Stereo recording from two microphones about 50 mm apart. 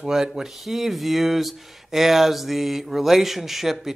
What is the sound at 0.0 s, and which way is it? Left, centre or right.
Speech, centre.